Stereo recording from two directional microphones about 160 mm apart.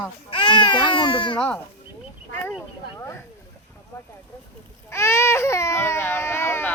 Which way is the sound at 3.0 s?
15° left (ahead or behind).